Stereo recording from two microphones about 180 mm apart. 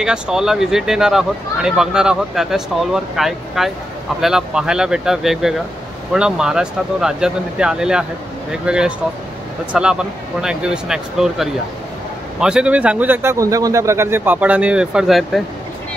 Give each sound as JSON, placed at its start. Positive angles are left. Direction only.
{"t": 0.0, "sound": "a man's voice", "side_deg": -5}